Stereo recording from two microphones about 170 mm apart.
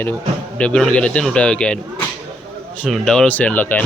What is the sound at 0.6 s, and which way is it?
A man's voice, 5° left (ahead or behind).